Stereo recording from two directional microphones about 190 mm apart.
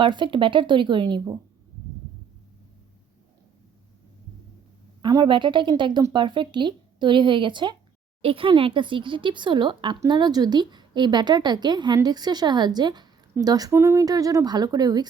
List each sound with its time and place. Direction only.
0.0 s speech: 25° right (ahead or behind)
5.0 s speech: 25° right (ahead or behind)